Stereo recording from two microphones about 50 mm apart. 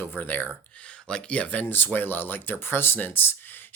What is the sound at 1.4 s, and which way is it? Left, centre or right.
Speech, left.